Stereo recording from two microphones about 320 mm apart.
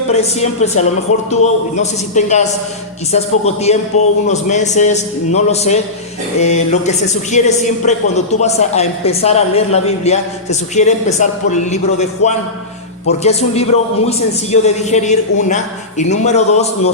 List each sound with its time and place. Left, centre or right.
0.1 s speech: centre